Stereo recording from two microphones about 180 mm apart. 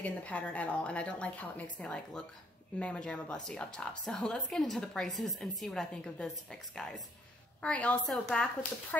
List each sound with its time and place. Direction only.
0.0 s a woman's voice: 5° left (ahead or behind)